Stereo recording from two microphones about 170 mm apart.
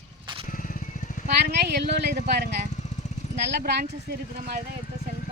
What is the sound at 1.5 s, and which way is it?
Speech, 75° right (ahead or behind).